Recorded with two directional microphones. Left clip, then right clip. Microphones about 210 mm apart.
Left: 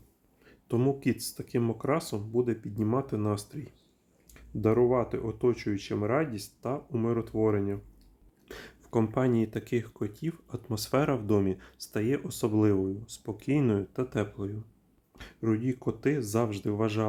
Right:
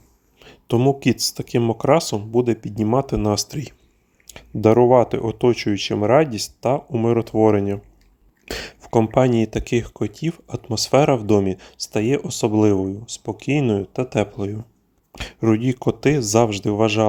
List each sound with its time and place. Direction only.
0.3 s speech: 35° right (ahead or behind)